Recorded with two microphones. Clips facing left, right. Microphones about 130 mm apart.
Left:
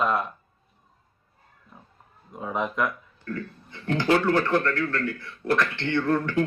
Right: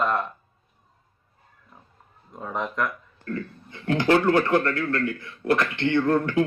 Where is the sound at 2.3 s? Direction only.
5° left (ahead or behind).